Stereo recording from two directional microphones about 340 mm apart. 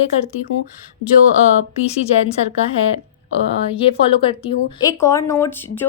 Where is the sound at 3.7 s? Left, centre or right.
Centre.